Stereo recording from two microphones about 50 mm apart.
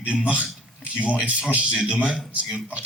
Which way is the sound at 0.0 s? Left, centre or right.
Right.